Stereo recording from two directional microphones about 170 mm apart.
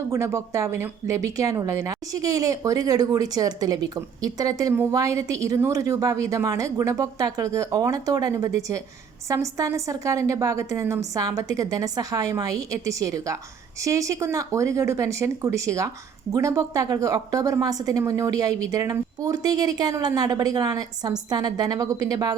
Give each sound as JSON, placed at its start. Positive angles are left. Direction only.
{"t": 0.1, "sound": "speech", "side_deg": -15}